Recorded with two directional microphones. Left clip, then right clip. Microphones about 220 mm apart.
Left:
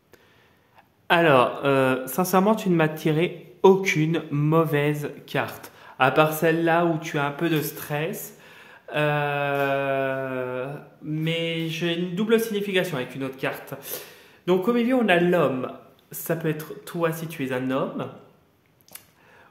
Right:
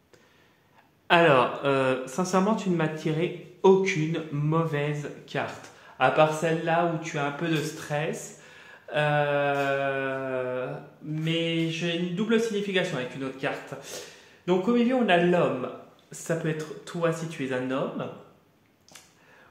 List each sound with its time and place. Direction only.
1.0 s speech: 30° left (ahead or behind)